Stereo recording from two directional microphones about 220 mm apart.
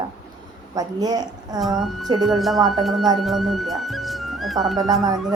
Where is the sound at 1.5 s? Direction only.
Centre (ahead or behind).